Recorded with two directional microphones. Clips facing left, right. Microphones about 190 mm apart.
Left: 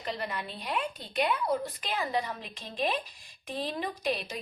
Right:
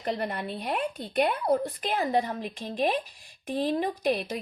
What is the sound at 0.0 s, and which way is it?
A woman's voice, 55° right (ahead or behind).